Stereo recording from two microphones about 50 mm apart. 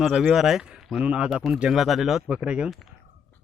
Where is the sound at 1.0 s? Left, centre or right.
Right.